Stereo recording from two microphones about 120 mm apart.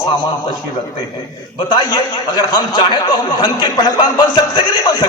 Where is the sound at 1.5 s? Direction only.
35° left (ahead or behind).